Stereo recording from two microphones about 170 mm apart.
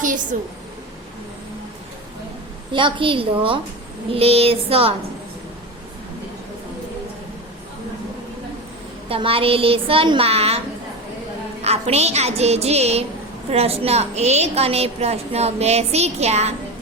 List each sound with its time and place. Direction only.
0.3 s a woman's voice: 50° right (ahead or behind)
2.7 s a woman's voice: 30° right (ahead or behind)
9.0 s a woman's voice: 35° right (ahead or behind)
11.6 s a woman's voice: 40° right (ahead or behind)